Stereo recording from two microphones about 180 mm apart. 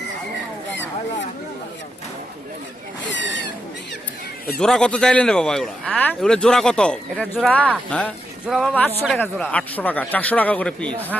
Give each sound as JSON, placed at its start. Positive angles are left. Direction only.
{"t": 3.1, "sound": "owl", "side_deg": 85}
{"t": 4.6, "sound": "a man's voice", "side_deg": 5}